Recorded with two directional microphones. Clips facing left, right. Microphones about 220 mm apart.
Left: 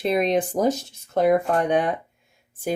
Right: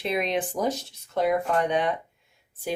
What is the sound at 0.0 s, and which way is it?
Speech, 40° left (ahead or behind).